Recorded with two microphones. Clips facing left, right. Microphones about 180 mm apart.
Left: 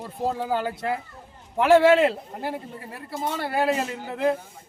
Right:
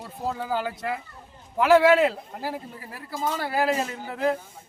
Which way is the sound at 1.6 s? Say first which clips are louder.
Left 1 dB; 25° left (ahead or behind).